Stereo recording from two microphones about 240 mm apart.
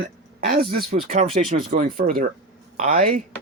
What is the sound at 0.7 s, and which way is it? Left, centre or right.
Speech, right.